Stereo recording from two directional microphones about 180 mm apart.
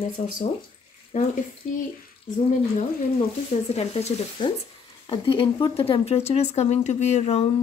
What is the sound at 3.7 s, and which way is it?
A woman's voice, 35° left (ahead or behind).